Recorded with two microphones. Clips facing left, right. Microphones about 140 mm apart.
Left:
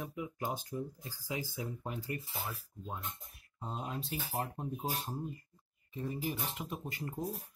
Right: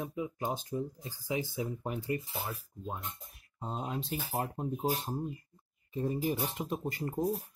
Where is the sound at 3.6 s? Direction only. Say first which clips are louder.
Right 3 dB; 25° right (ahead or behind).